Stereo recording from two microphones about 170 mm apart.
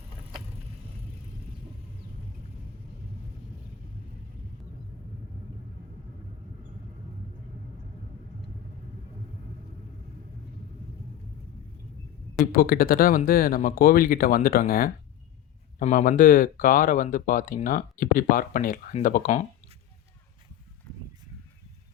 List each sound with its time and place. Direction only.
12.5 s speech: 60° left (ahead or behind)